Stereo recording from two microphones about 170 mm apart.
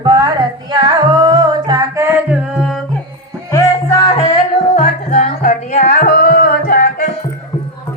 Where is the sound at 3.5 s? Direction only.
15° left (ahead or behind).